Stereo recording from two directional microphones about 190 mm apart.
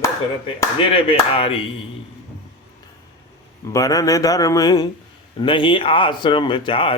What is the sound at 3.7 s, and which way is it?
A man's voice, 20° left (ahead or behind).